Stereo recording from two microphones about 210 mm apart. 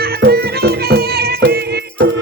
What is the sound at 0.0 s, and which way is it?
Music, 50° right (ahead or behind).